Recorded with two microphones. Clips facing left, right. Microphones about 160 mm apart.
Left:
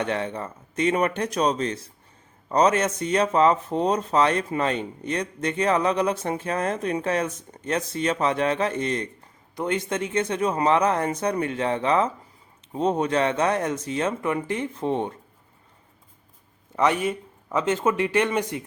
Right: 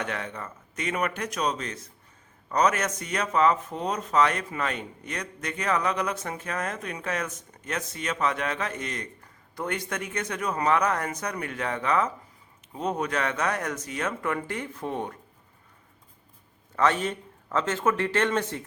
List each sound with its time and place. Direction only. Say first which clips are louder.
0.0 s speech: left 6 dB; 30° left (ahead or behind)
16.7 s speech: left 2 dB; 15° left (ahead or behind)